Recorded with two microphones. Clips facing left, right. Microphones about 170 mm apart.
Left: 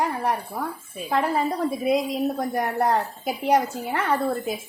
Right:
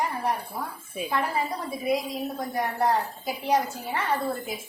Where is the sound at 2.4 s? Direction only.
50° left (ahead or behind).